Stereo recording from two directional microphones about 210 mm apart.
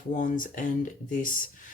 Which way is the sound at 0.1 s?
40° left (ahead or behind).